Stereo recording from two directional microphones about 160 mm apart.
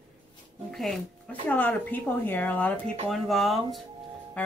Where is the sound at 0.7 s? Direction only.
Centre (ahead or behind).